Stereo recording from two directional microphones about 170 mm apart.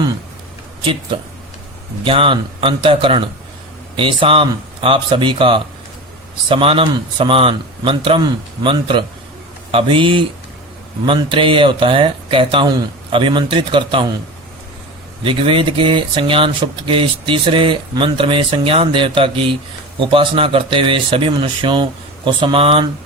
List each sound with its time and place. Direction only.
2.0 s speech: 30° right (ahead or behind)
15.2 s speech: 30° right (ahead or behind)